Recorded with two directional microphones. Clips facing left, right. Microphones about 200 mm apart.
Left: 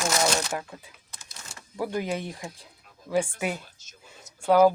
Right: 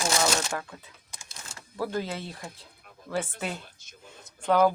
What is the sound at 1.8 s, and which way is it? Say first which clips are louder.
Speech: left 2 dB; 15° left (ahead or behind).